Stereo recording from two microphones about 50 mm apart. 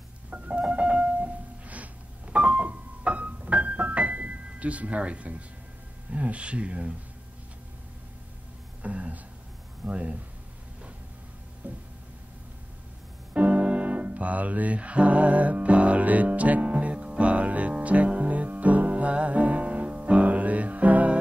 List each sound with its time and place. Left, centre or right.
0.3 s music: right
2.4 s keyboard: right
6.1 s speech: right
8.8 s speech: right
11.6 s a sound: right
13.3 s music: right